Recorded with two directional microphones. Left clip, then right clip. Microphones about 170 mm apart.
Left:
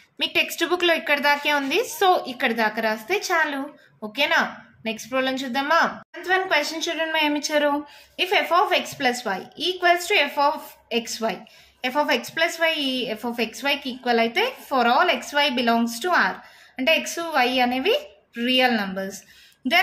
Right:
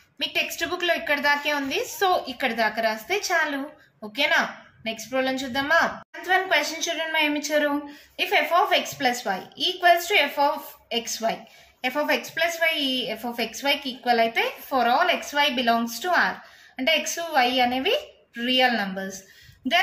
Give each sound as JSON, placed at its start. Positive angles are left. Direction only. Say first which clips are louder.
{"t": 0.2, "sound": "a woman's voice", "louder": "left 3 dB", "side_deg": 45}